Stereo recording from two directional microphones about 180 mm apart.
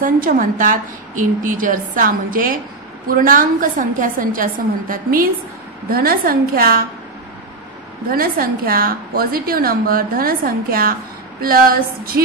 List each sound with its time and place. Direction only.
0.0 s a woman's voice: 50° right (ahead or behind)
8.1 s a woman's voice: 55° right (ahead or behind)